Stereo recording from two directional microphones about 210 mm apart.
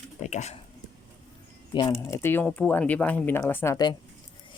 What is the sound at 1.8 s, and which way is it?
Speech, 15° left (ahead or behind).